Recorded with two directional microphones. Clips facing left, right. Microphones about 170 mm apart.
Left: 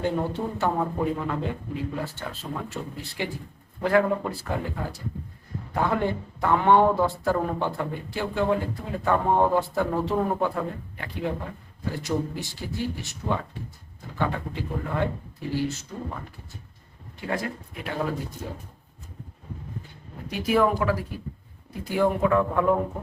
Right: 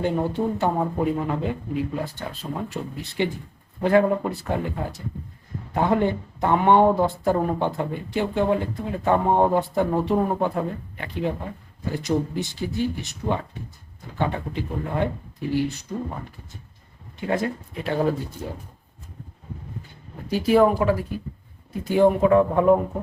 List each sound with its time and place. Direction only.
0.0 s speech: 15° right (ahead or behind)
17.2 s speech: 25° right (ahead or behind)
20.3 s speech: 30° right (ahead or behind)